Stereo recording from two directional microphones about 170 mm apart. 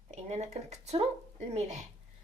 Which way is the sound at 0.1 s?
40° right (ahead or behind).